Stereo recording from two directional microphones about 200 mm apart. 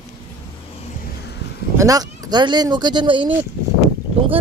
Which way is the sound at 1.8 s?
20° right (ahead or behind).